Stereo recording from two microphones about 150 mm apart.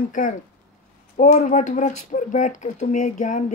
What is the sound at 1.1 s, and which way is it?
Speech, 55° left (ahead or behind).